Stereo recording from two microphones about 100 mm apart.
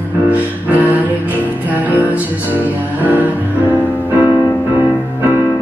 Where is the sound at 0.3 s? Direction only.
15° right (ahead or behind).